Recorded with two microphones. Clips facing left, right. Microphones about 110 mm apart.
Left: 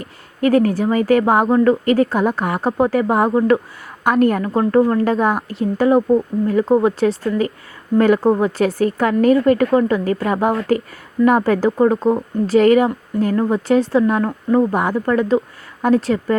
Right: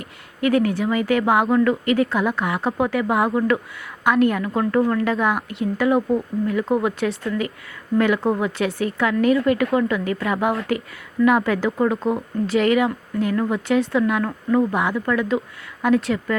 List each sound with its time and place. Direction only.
0.0 s speech: 40° left (ahead or behind)